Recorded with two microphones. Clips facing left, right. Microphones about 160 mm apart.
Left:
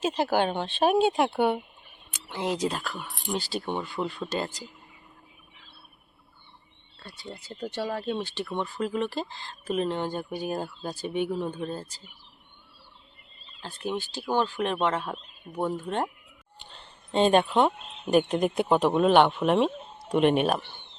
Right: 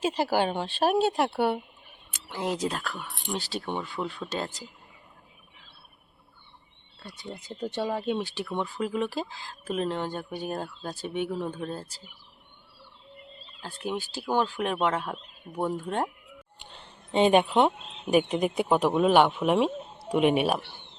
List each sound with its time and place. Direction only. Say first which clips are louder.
0.0 s speech: left 1 dB; 10° right (ahead or behind)
7.0 s speech: right 1 dB; 15° right (ahead or behind); by 11.9 s centre (ahead or behind)
13.6 s speech: left 1 dB; 5° right (ahead or behind)
17.1 s speech: even; 15° right (ahead or behind)
17.7 s speech: even; 5° right (ahead or behind)